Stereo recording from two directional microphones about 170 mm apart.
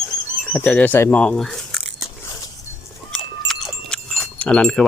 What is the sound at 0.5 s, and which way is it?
Speech, 10° left (ahead or behind).